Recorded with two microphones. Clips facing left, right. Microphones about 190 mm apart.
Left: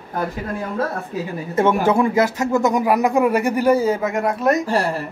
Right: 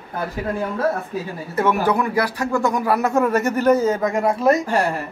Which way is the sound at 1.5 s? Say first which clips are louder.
Left 3 dB; 25° left (ahead or behind).